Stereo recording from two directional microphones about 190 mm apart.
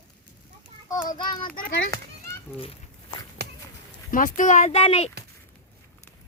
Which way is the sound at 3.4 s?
60° right (ahead or behind).